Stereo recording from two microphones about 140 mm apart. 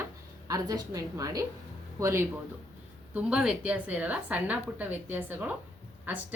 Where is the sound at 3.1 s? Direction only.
5° right (ahead or behind).